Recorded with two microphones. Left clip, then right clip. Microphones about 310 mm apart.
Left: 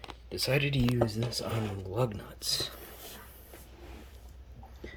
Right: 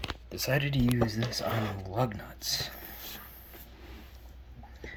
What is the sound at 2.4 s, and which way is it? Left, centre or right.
Speech, left.